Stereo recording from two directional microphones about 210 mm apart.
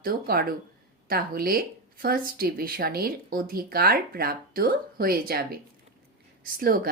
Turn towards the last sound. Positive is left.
turn(degrees=-45)  # may be behind; listen again after turning